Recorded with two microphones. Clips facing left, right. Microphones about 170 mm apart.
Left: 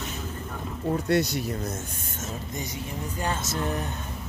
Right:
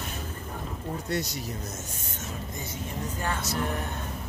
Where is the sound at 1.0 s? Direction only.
65° left (ahead or behind).